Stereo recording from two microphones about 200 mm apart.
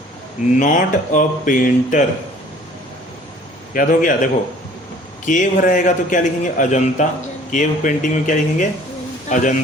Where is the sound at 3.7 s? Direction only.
40° left (ahead or behind).